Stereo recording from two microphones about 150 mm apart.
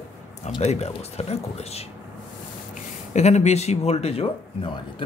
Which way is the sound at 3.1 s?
50° left (ahead or behind).